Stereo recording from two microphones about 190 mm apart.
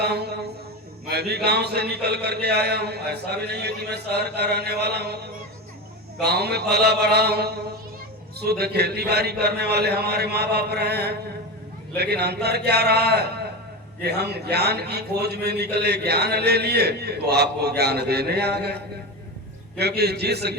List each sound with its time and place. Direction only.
0.0 s a man's voice: 60° right (ahead or behind)
6.2 s a man's voice: 60° right (ahead or behind)
19.8 s a man's voice: 60° right (ahead or behind)